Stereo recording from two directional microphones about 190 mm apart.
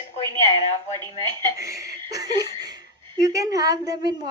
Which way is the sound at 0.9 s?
20° right (ahead or behind).